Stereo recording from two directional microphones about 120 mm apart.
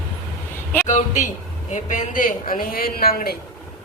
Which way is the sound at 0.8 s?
90° left.